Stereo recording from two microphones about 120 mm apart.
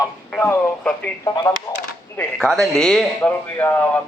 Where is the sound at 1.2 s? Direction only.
30° left (ahead or behind).